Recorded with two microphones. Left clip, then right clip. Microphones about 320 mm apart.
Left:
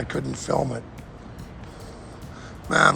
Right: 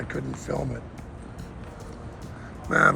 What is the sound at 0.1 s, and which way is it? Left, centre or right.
Speech, centre.